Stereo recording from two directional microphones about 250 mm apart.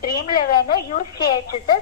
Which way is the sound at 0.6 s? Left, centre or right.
Left.